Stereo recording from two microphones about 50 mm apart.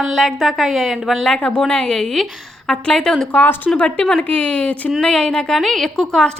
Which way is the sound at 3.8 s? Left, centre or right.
Left.